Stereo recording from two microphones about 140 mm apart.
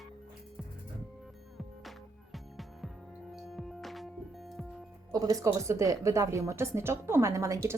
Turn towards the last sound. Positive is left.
turn(degrees=-20)  # may be behind; listen again after turning